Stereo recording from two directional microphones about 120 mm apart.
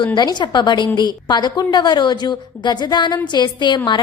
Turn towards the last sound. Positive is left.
turn(degrees=40)  # may be behind; listen again after turning